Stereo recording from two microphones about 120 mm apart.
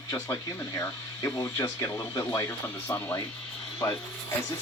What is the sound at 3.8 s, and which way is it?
Speech, 25° left (ahead or behind).